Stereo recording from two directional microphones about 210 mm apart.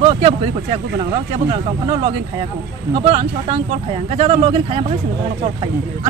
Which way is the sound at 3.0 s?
30° right (ahead or behind).